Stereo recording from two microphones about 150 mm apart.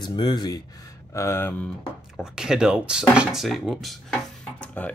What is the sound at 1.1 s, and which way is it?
Speech, 15° left (ahead or behind).